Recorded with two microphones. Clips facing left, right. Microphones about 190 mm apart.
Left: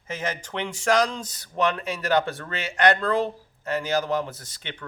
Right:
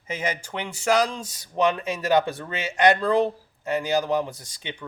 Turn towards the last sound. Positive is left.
turn(degrees=-15)  # may be behind; listen again after turning